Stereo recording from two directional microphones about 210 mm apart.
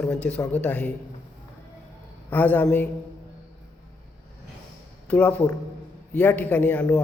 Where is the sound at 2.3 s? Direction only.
10° left (ahead or behind).